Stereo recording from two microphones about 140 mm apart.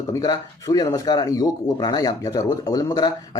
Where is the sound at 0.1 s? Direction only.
25° left (ahead or behind).